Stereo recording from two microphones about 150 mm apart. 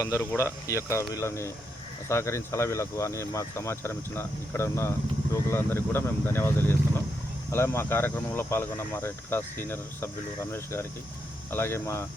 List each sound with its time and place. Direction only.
0.0 s speech: 20° left (ahead or behind)